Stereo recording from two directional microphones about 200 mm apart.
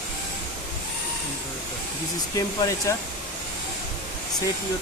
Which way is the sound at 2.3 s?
15° left (ahead or behind).